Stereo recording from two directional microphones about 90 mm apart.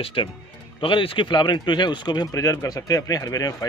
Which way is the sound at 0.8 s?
75° left (ahead or behind).